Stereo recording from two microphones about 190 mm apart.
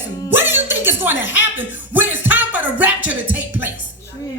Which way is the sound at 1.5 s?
10° right (ahead or behind).